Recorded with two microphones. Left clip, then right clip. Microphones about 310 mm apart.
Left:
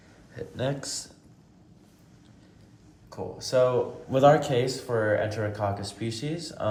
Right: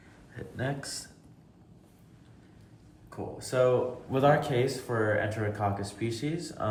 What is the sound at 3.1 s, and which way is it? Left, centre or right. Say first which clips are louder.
Speech: left 5 dB; centre.